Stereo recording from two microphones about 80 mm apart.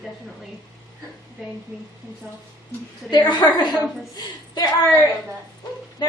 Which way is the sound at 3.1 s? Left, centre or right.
Left.